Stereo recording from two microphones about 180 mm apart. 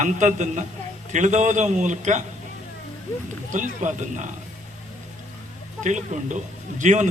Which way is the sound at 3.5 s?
45° right (ahead or behind).